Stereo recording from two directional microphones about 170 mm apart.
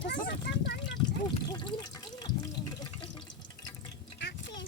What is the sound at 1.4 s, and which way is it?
Speech, 25° left (ahead or behind).